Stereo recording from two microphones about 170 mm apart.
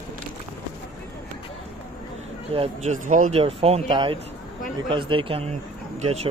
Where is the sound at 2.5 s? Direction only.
40° right (ahead or behind).